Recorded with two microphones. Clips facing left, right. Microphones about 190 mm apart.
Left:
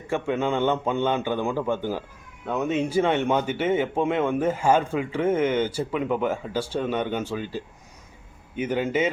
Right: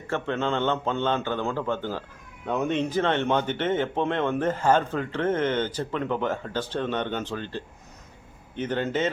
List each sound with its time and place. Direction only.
0.1 s a man's voice: 10° left (ahead or behind)